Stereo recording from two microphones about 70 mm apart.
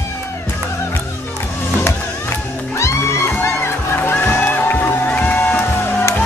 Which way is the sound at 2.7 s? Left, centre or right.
Left.